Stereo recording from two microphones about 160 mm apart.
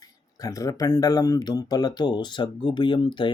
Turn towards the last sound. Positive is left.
turn(degrees=30)  # may be behind; listen again after turning